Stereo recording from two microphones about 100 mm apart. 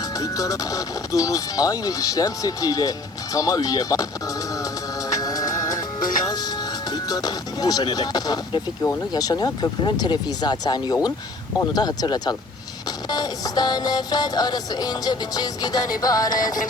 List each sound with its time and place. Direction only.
0.2 s speech: 35° left (ahead or behind)
5.0 s music: 40° left (ahead or behind)